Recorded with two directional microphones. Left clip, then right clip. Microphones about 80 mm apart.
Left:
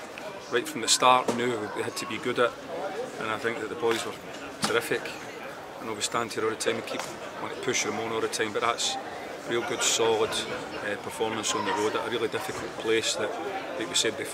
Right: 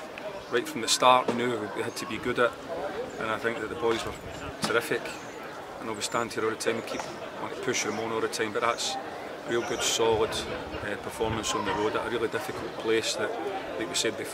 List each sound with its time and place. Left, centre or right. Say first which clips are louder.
0.5 s speech: left 1 dB; centre
11.5 s speech: left 1 dB; left
11.8 s speech: even; centre